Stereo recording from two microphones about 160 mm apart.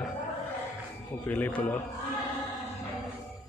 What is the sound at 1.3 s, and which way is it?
Speech, 10° left (ahead or behind).